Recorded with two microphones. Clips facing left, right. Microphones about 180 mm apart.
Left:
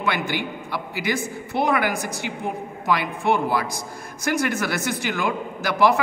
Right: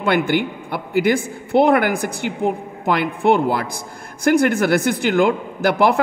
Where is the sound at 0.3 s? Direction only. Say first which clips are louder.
Right 7 dB; 55° right (ahead or behind).